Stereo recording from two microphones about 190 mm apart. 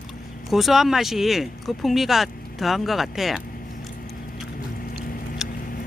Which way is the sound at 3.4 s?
45° left (ahead or behind).